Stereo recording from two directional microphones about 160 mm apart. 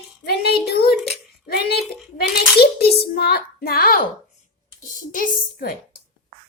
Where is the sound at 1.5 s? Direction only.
75° left (ahead or behind).